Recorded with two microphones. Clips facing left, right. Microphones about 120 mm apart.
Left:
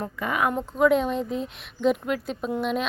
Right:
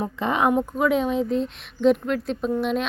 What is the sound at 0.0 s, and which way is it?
Speech, 25° right (ahead or behind).